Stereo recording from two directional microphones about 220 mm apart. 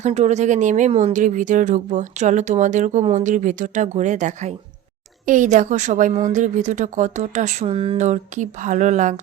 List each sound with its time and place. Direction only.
0.0 s a woman's voice: 30° right (ahead or behind)